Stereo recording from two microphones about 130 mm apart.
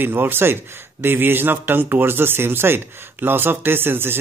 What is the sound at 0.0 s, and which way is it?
Speech, 15° right (ahead or behind).